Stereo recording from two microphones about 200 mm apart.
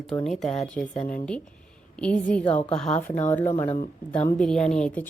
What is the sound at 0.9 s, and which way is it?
Speech, 40° left (ahead or behind).